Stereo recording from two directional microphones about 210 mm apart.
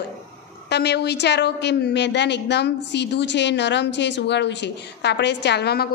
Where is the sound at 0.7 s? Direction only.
50° left (ahead or behind).